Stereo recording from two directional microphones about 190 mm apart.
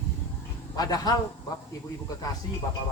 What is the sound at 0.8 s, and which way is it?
Speech, 20° left (ahead or behind).